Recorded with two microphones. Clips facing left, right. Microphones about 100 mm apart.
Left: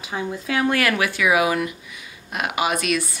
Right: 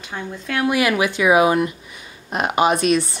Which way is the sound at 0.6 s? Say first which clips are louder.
Right 3 dB; 15° right (ahead or behind).